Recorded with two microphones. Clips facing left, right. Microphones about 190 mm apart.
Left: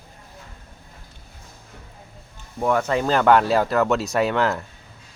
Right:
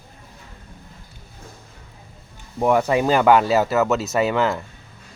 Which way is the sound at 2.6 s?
15° right (ahead or behind).